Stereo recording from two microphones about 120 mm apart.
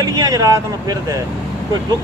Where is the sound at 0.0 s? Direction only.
30° right (ahead or behind).